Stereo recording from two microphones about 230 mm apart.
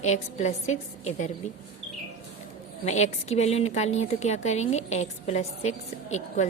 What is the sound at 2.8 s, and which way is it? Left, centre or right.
A woman's voice, left.